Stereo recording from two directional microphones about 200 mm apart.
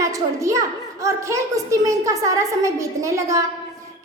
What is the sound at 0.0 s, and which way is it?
A woman's voice, 15° right (ahead or behind).